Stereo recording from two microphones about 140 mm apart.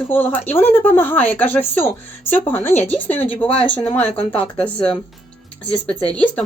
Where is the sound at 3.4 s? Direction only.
40° left (ahead or behind).